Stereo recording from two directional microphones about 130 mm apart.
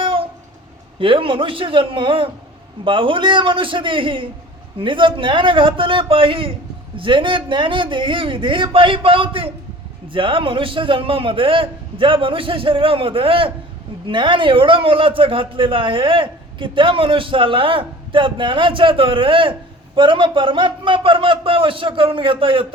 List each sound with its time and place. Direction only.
0.0 s train: 45° right (ahead or behind)
0.9 s a man's voice: 45° right (ahead or behind)